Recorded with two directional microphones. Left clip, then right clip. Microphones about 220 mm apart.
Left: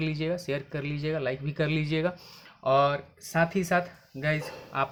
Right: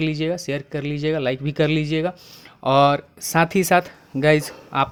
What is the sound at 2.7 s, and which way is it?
Speech, 40° right (ahead or behind).